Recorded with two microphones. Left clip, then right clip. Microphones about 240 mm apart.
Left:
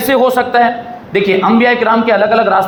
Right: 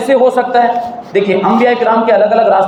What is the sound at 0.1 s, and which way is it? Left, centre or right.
A man's voice, left.